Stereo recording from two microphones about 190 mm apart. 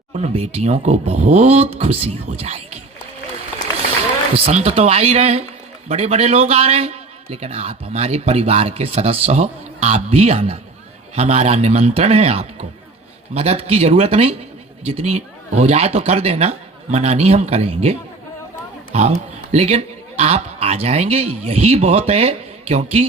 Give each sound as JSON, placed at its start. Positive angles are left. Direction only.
{"t": 0.1, "sound": "a man's voice", "side_deg": -35}
{"t": 4.4, "sound": "a man's voice", "side_deg": -35}